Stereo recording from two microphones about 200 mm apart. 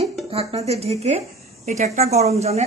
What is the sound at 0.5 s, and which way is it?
A woman's voice, 30° right (ahead or behind).